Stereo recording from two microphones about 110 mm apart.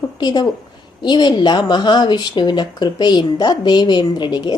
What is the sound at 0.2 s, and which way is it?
A woman's voice, 40° left (ahead or behind).